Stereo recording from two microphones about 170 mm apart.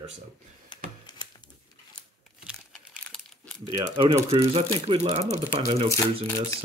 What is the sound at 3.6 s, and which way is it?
Speech, 30° right (ahead or behind).